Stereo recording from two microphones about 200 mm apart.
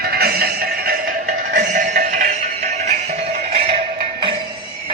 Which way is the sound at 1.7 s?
40° right (ahead or behind).